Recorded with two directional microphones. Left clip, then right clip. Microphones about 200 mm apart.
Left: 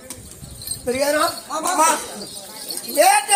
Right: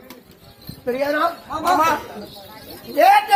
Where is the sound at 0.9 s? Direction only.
5° right (ahead or behind).